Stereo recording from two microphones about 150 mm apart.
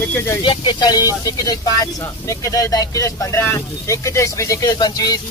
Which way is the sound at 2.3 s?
20° left (ahead or behind).